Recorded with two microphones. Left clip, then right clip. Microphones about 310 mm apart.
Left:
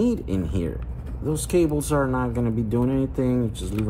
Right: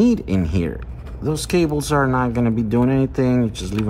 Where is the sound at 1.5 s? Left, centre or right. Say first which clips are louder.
Right 2 dB; right.